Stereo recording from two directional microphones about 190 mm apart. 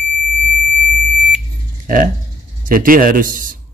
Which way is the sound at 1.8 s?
45° right (ahead or behind).